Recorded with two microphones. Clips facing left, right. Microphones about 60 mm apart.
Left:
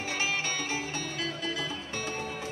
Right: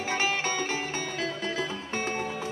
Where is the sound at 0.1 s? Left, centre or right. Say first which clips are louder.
Right 4 dB; right.